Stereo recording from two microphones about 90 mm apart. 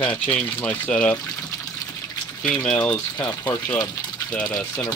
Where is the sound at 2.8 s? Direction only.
25° left (ahead or behind).